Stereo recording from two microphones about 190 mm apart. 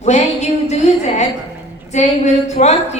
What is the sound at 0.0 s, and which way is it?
Music, 35° left (ahead or behind).